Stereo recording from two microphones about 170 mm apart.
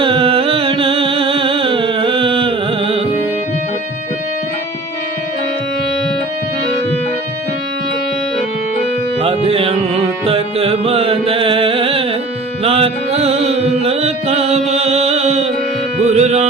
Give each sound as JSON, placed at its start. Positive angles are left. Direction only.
{"t": 0.0, "sound": "music", "side_deg": -30}
{"t": 9.2, "sound": "music", "side_deg": -35}